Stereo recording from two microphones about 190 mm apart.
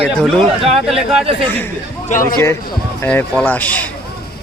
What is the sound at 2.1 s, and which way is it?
Speech, 40° left (ahead or behind).